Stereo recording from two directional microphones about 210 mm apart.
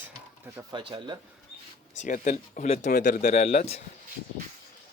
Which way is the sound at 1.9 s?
35° left (ahead or behind).